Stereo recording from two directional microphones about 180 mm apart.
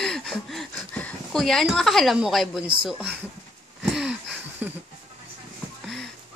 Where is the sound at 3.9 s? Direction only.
Centre (ahead or behind).